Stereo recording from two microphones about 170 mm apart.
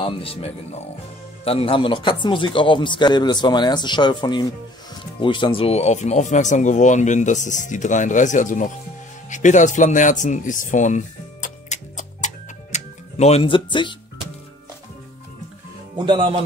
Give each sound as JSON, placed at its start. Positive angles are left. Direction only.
{"t": 0.0, "sound": "a man's voice", "side_deg": 30}
{"t": 16.0, "sound": "speech", "side_deg": -30}